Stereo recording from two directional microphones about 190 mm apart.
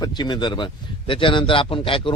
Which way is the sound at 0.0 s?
25° left (ahead or behind).